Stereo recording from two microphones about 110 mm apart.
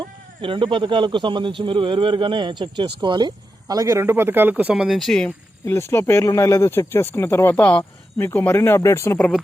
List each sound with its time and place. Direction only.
0.0 s speech: 50° right (ahead or behind); by 4.9 s 10° right (ahead or behind)
4.9 s speech: 5° left (ahead or behind)
5.6 s speech: 20° left (ahead or behind)